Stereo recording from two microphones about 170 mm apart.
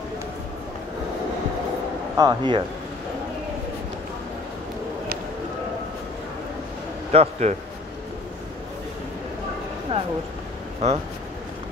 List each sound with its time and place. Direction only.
2.1 s speech: 25° right (ahead or behind)
7.1 s a man's voice: 40° right (ahead or behind)
9.9 s speech: 30° right (ahead or behind)